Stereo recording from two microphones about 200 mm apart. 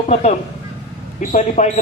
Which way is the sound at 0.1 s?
35° left (ahead or behind).